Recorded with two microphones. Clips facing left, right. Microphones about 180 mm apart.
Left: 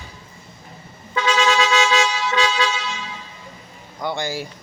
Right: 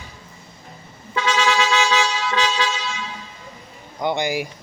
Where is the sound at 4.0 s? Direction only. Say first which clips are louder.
Right 4 dB; 20° right (ahead or behind).